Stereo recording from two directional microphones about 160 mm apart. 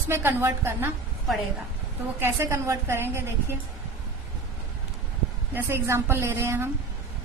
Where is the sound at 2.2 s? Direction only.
15° right (ahead or behind).